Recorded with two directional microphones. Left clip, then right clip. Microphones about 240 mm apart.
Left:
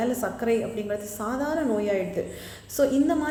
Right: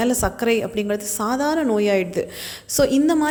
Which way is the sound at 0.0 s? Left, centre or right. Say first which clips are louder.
Right 6 dB; right.